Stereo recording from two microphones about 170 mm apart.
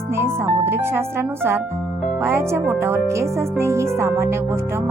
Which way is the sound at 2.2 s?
15° right (ahead or behind).